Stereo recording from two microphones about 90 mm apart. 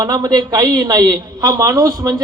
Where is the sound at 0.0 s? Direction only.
45° right (ahead or behind).